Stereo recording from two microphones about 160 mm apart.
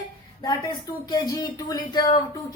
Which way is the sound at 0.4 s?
25° left (ahead or behind).